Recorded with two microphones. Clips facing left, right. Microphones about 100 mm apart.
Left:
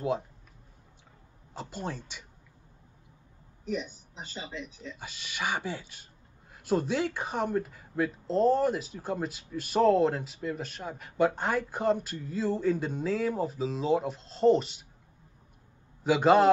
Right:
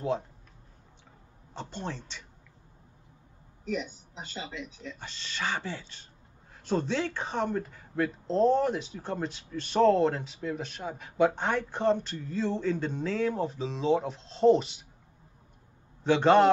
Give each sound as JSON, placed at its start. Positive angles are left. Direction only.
{"t": 1.5, "sound": "speech", "side_deg": 10}
{"t": 4.5, "sound": "speech", "side_deg": 35}
{"t": 4.9, "sound": "speech", "side_deg": 10}
{"t": 16.0, "sound": "a man's voice", "side_deg": 10}